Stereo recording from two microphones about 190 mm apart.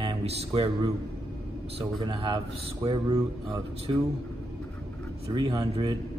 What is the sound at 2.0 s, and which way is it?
Speech, 25° right (ahead or behind).